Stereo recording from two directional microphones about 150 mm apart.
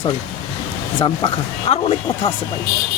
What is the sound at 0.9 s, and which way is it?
Speech, 35° left (ahead or behind).